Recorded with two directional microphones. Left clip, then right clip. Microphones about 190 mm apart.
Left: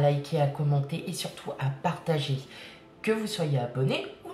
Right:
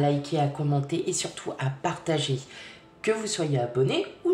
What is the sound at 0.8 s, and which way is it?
A woman's voice, 40° right (ahead or behind).